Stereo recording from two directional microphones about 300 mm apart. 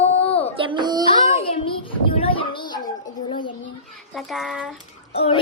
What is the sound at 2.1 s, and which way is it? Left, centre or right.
Child singing, centre.